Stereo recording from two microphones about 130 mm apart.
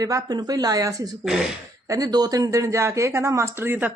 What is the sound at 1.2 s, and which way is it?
Speech, 5° right (ahead or behind).